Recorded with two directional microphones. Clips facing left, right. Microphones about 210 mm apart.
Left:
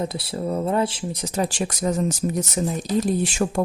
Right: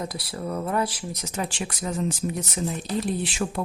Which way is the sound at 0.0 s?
25° left (ahead or behind).